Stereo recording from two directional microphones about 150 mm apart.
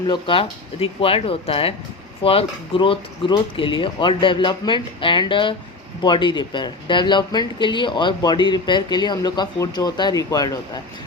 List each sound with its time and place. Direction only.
0.1 s speech: 35° left (ahead or behind)